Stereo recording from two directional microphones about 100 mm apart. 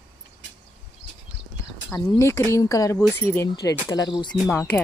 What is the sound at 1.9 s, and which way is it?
Speech, 25° left (ahead or behind).